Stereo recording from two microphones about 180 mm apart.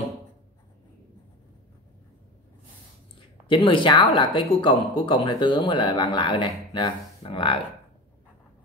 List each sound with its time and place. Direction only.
3.4 s speech: 25° left (ahead or behind)